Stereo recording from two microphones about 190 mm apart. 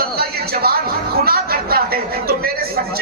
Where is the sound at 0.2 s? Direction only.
55° right (ahead or behind).